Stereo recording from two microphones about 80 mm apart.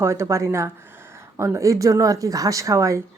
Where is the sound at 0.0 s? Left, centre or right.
Right.